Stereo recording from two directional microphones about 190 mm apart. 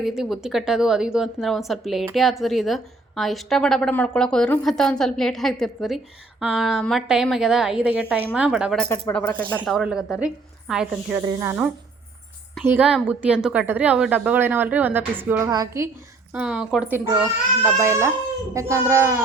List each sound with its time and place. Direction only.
0.0 s a woman's voice: centre (ahead or behind)
8.9 s a woman's voice: 10° left (ahead or behind)
11.3 s a woman's voice: 15° right (ahead or behind)
12.6 s a woman's voice: 5° right (ahead or behind)
16.3 s a woman's voice: 5° right (ahead or behind)